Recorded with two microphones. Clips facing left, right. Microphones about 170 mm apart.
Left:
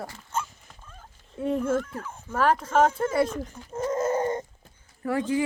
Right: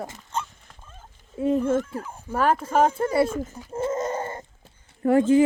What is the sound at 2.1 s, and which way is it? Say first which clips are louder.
Speech: right 1 dB; 10° right (ahead or behind).